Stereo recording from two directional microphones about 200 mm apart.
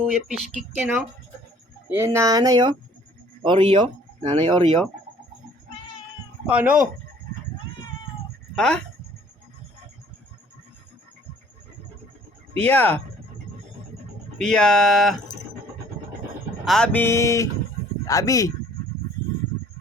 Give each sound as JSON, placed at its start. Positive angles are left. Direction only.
{"t": 0.0, "sound": "speech", "side_deg": 0}
{"t": 6.4, "sound": "speech", "side_deg": -5}
{"t": 8.5, "sound": "speech", "side_deg": 5}
{"t": 12.6, "sound": "a sound", "side_deg": 10}
{"t": 14.3, "sound": "speech", "side_deg": 5}
{"t": 16.6, "sound": "a sound", "side_deg": 5}